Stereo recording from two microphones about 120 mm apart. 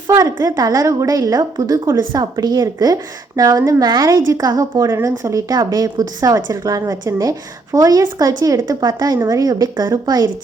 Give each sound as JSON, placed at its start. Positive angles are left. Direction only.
{"t": 0.1, "sound": "a woman's voice", "side_deg": -25}